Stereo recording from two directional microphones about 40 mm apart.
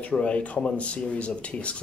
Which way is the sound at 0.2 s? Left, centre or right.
Left.